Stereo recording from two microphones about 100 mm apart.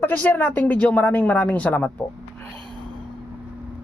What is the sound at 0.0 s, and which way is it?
Speech, 20° left (ahead or behind).